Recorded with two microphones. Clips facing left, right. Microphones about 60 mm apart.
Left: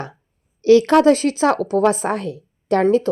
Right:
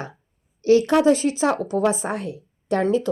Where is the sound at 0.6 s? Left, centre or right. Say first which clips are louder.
Left 4 dB; left.